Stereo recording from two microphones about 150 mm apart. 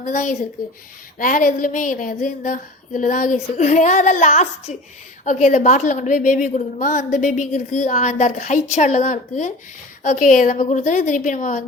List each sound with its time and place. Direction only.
0.0 s a woman's voice: 55° left (ahead or behind)